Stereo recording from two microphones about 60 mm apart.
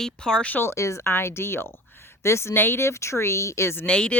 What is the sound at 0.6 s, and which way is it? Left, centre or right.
Speech, left.